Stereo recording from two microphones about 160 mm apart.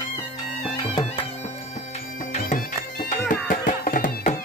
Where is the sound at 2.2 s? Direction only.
55° left (ahead or behind).